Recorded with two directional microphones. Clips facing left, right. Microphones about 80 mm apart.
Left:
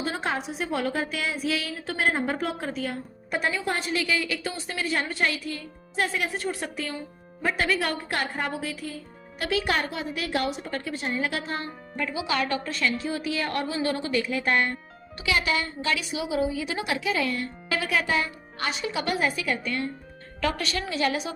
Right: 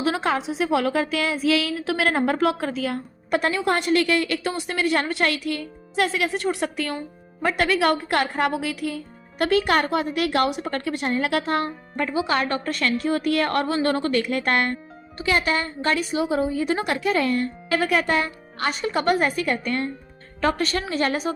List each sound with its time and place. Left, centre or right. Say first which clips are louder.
0.0 s a woman's voice: right 6 dB; right
9.4 s a woman's voice: right 6 dB; right
15.2 s a woman's voice: right 4 dB; right